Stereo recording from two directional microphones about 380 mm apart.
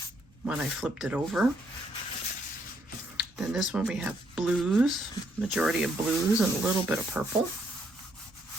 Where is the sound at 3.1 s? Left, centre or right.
Centre.